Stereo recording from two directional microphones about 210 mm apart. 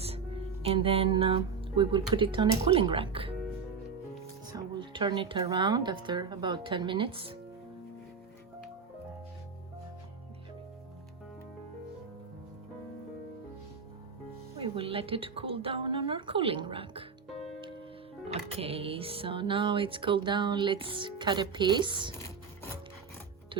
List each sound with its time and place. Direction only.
0.0 s speech: 30° right (ahead or behind)
4.4 s speech: 20° right (ahead or behind)
14.5 s speech: 25° right (ahead or behind)
18.5 s speech: 25° right (ahead or behind)
22.1 s music: 10° left (ahead or behind)